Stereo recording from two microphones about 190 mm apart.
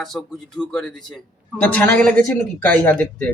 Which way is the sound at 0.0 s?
Centre (ahead or behind).